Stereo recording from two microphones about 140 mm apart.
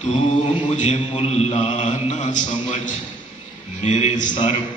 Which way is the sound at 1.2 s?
50° left (ahead or behind).